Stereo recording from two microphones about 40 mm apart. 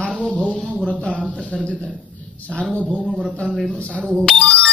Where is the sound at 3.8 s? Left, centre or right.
Left.